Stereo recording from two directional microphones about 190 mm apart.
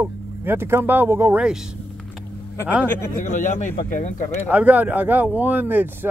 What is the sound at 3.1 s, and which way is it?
Speech, 45° left (ahead or behind).